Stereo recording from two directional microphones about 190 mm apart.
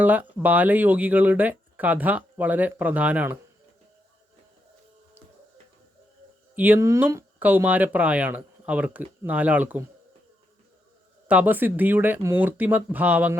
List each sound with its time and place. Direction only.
0.0 s speech: 10° right (ahead or behind)
6.6 s speech: 10° right (ahead or behind)
11.3 s speech: 10° right (ahead or behind)